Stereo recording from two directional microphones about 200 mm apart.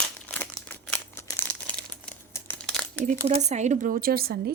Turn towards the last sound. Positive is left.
turn(degrees=-50)  # may be behind; listen again after turning